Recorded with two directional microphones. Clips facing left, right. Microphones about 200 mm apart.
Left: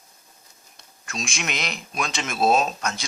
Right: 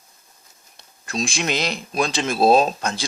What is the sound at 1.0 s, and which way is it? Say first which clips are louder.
A man's voice: right 6 dB; 35° right (ahead or behind).